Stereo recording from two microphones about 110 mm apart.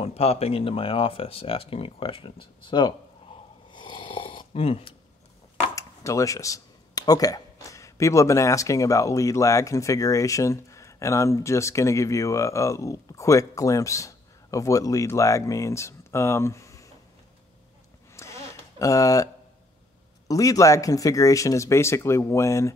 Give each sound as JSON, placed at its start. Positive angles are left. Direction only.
{"t": 0.0, "sound": "speech", "side_deg": 65}
{"t": 3.7, "sound": "snoring", "side_deg": 45}
{"t": 5.8, "sound": "speech", "side_deg": 30}
{"t": 18.1, "sound": "a sound", "side_deg": 25}
{"t": 20.2, "sound": "speech", "side_deg": 30}